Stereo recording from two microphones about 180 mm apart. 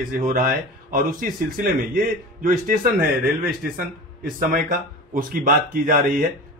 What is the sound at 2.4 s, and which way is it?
Speech, 50° right (ahead or behind).